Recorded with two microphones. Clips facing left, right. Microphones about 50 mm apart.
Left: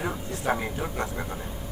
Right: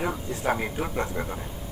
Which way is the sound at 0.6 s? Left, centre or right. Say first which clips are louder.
Right 2 dB; centre.